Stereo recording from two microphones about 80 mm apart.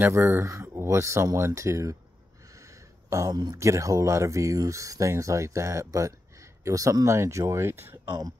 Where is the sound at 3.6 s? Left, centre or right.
Right.